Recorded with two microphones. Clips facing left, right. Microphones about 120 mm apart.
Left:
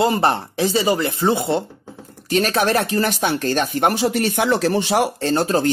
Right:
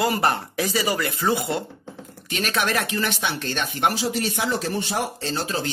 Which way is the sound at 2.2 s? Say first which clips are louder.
Left 7 dB; 40° left (ahead or behind).